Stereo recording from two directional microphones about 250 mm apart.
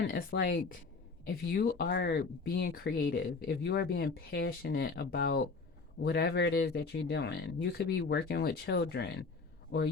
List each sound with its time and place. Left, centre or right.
0.1 s speech: left